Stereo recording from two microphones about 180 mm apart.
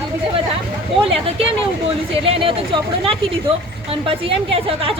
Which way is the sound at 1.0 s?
30° right (ahead or behind).